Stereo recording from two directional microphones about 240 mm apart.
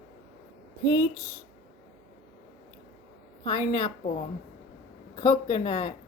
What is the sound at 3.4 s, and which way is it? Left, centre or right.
Speech, left.